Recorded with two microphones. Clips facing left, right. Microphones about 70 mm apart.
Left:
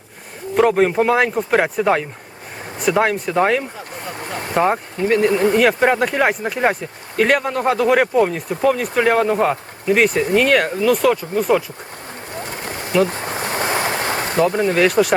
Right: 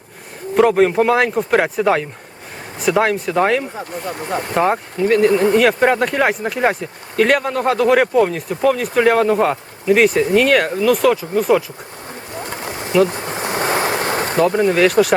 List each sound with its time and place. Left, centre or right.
0.5 s speech: centre
13.4 s waves: right
14.0 s a sound: right
14.3 s speech: centre